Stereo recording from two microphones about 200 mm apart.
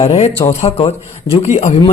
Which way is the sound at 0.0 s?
25° left (ahead or behind).